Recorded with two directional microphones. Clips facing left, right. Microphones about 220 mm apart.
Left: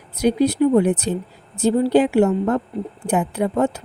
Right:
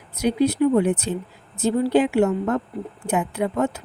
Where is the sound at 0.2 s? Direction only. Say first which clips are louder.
Left 2 dB; 35° left (ahead or behind).